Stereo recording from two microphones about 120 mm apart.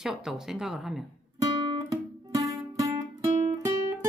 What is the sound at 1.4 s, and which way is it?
Music, 40° right (ahead or behind).